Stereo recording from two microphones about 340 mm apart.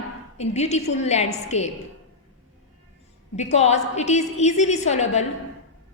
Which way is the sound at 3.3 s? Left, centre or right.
Centre.